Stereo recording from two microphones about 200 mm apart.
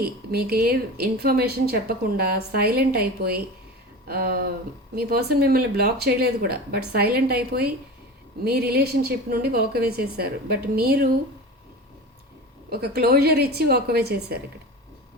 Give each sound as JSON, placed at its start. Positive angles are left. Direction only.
{"t": 0.3, "sound": "a woman's voice", "side_deg": -50}
{"t": 12.7, "sound": "a woman's voice", "side_deg": -50}